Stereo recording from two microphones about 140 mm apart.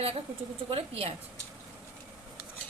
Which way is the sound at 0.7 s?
45° right (ahead or behind).